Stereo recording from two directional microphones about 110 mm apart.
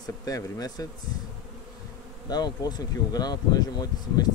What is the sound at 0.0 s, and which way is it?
Speech, 35° left (ahead or behind).